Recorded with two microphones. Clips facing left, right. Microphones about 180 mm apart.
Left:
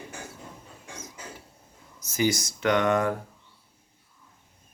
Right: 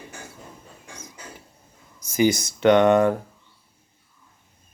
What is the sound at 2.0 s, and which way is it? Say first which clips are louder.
Speech: right 6 dB; 15° right (ahead or behind).